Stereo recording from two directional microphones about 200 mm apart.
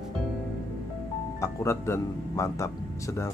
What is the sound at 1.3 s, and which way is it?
Speech, 15° left (ahead or behind).